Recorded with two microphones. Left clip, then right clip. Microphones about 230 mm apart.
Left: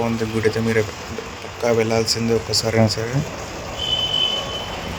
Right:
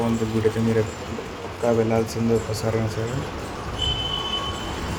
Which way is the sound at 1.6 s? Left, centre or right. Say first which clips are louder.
Left 3 dB; left.